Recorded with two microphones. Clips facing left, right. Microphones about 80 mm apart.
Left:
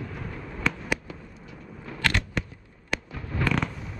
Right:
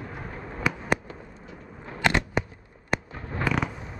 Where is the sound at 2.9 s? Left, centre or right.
Right.